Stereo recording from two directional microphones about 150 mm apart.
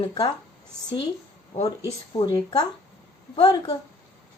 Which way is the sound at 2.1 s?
30° left (ahead or behind).